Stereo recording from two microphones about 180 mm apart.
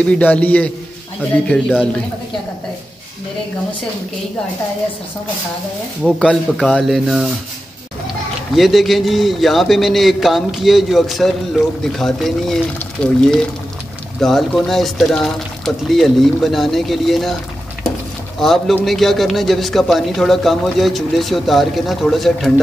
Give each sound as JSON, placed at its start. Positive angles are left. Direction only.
{"t": 0.0, "sound": "a man's voice", "side_deg": 5}
{"t": 1.5, "sound": "a man's voice", "side_deg": -5}
{"t": 6.0, "sound": "a man's voice", "side_deg": 0}
{"t": 8.5, "sound": "a man's voice", "side_deg": 0}
{"t": 18.4, "sound": "a man's voice", "side_deg": 0}